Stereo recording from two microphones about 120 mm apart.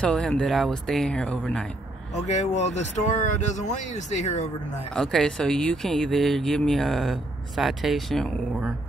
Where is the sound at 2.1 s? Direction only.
70° left (ahead or behind).